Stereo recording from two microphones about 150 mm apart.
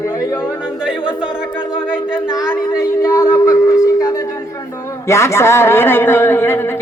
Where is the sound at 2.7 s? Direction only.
20° left (ahead or behind).